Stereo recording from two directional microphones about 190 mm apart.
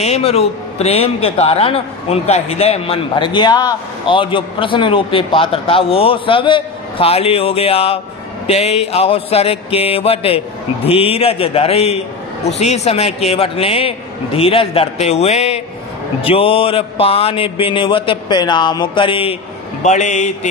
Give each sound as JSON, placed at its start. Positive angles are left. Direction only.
{"t": 0.0, "sound": "a man's voice", "side_deg": 35}
{"t": 19.8, "sound": "a man's voice", "side_deg": 40}